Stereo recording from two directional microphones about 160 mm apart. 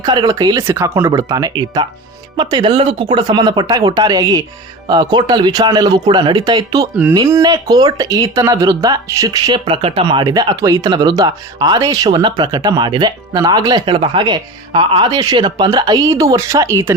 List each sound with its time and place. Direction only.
0.0 s speech: 25° right (ahead or behind)